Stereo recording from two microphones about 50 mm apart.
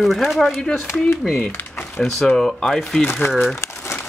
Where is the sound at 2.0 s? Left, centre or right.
Centre.